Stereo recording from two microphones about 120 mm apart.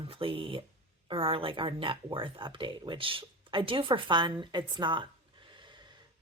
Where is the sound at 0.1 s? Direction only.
50° right (ahead or behind).